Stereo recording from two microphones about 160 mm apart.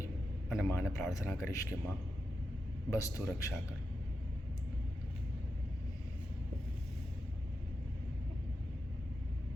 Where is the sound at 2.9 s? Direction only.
15° left (ahead or behind).